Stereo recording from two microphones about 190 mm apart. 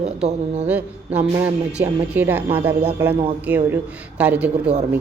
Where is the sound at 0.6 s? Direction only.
5° right (ahead or behind).